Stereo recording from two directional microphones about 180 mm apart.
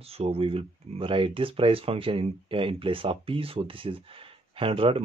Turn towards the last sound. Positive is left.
turn(degrees=-30)  # may be behind; listen again after turning